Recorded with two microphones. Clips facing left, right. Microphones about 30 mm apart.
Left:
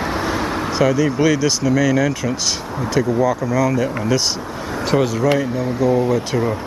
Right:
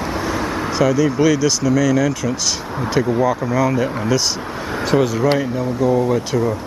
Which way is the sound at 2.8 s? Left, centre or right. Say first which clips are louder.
Even; centre.